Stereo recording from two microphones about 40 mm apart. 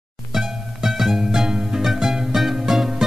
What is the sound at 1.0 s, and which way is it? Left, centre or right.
Music, centre.